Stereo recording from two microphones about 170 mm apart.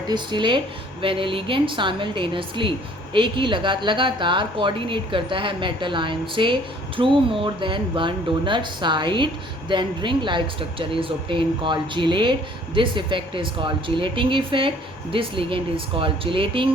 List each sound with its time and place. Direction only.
0.1 s a woman's voice: 25° right (ahead or behind)